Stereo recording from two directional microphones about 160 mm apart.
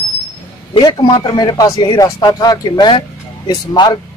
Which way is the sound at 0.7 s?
25° left (ahead or behind).